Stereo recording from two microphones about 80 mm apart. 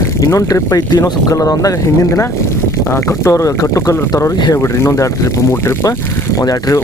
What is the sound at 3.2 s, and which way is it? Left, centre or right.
Speech, left.